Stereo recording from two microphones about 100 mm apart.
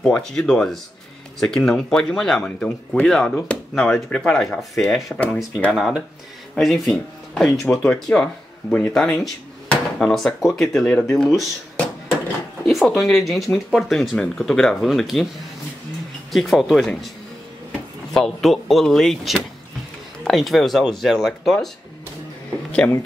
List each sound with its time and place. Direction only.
0.0 s speech: 5° left (ahead or behind)
5.7 s speech: 5° right (ahead or behind)
12.6 s speech: centre (ahead or behind)
16.3 s speech: centre (ahead or behind)
18.1 s speech: 5° left (ahead or behind)
22.8 s speech: 20° left (ahead or behind)